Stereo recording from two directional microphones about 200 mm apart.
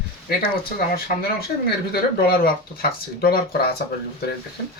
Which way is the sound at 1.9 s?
50° left (ahead or behind).